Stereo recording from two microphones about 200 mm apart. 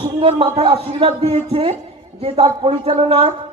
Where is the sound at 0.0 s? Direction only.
30° right (ahead or behind).